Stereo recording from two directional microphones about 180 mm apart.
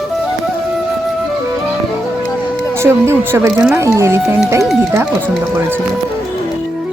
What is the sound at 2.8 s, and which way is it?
A woman's voice, 15° right (ahead or behind).